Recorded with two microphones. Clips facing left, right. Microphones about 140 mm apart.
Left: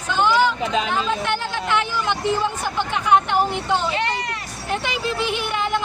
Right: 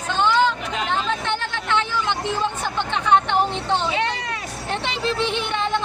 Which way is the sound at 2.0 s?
20° right (ahead or behind).